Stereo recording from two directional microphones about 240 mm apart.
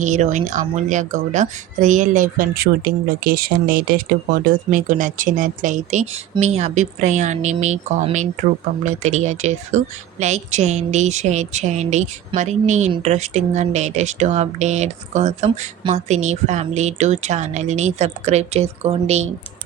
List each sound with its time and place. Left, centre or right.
0.0 s speech: right